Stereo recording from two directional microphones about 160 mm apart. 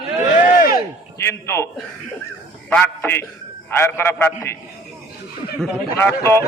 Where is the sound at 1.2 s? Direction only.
15° left (ahead or behind).